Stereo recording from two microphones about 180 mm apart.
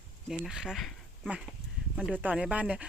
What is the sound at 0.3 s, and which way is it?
Speech, 5° right (ahead or behind).